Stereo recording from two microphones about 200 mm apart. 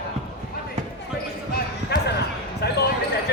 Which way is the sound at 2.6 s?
55° left (ahead or behind).